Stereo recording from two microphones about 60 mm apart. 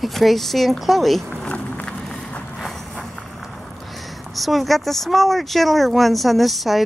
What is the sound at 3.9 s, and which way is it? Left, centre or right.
Speech, centre.